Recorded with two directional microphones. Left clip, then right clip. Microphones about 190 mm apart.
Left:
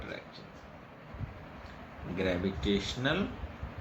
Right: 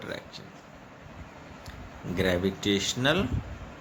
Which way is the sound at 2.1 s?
60° right (ahead or behind).